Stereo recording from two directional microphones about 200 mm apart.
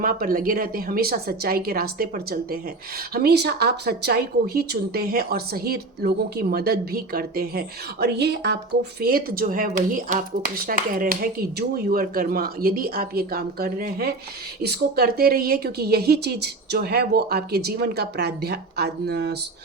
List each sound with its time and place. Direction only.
0.0 s speech: 45° right (ahead or behind)